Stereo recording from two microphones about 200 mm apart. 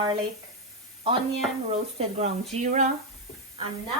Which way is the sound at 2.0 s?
30° right (ahead or behind).